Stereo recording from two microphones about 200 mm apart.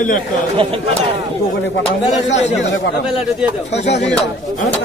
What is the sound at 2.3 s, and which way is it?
Speech, 35° left (ahead or behind).